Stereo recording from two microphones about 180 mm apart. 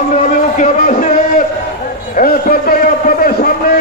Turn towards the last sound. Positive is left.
turn(degrees=55)  # may be behind; listen again after turning